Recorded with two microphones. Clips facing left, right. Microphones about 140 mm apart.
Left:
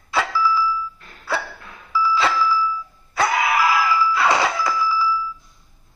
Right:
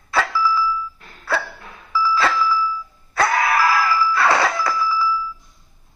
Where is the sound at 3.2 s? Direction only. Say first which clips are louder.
Right 1 dB; 20° left (ahead or behind).